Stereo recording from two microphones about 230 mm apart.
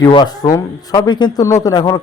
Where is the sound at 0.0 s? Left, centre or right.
Centre.